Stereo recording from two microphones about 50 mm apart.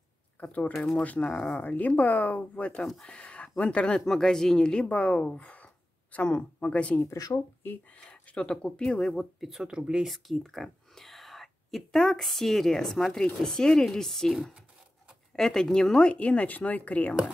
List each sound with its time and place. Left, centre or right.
0.4 s speech: left
0.7 s speech: centre
1.0 s speech: left
9.4 s speech: centre
9.7 s speech: centre
10.0 s speech: centre; by 17.1 s left